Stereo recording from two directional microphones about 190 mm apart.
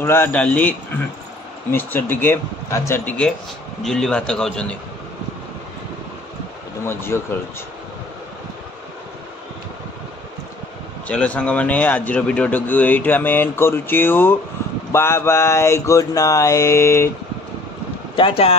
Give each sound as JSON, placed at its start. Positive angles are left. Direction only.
{"t": 0.0, "sound": "a man's voice", "side_deg": 10}
{"t": 6.9, "sound": "a man's voice", "side_deg": 15}
{"t": 11.1, "sound": "a man's voice", "side_deg": 5}
{"t": 18.1, "sound": "speech", "side_deg": 30}